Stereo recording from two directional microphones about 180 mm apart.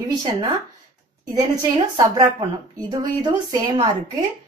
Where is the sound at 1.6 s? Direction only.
20° right (ahead or behind).